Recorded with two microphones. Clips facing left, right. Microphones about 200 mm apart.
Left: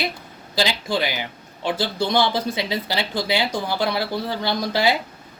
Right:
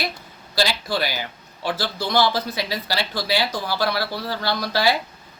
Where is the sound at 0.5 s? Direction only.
15° left (ahead or behind).